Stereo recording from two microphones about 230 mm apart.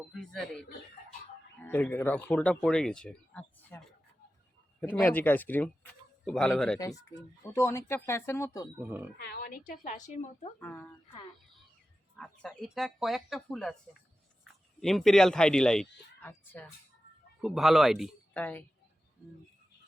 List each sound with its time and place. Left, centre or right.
0.1 s speech: centre
1.6 s speech: centre
6.7 s speech: centre
8.8 s speech: centre
9.1 s speech: left
10.6 s speech: centre
12.1 s speech: centre
14.8 s speech: centre